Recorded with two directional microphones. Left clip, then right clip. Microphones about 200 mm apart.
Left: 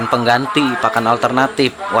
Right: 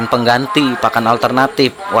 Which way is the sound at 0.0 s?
15° right (ahead or behind).